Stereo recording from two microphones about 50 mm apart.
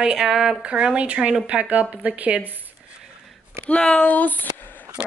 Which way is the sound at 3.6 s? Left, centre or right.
Left.